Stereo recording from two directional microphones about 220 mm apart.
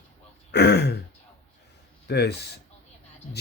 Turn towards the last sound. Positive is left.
turn(degrees=35)  # may be behind; listen again after turning